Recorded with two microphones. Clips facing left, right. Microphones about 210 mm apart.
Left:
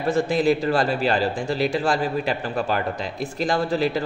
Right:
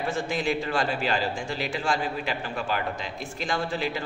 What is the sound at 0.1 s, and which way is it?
A man's voice, 35° left (ahead or behind).